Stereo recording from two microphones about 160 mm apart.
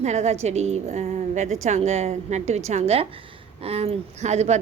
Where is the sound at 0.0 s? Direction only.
45° right (ahead or behind).